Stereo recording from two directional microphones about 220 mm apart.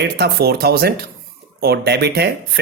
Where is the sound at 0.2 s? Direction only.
45° right (ahead or behind).